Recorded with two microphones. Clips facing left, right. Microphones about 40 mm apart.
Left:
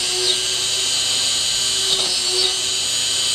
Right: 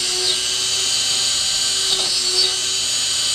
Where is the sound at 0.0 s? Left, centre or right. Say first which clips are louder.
Left 1 dB; centre.